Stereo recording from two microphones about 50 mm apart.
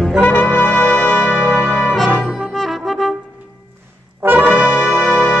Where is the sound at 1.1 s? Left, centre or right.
Right.